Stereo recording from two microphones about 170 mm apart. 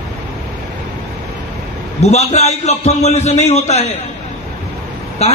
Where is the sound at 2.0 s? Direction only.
40° left (ahead or behind).